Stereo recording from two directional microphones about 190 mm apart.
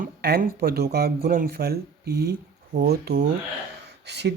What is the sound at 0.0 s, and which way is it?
Speech, 55° right (ahead or behind).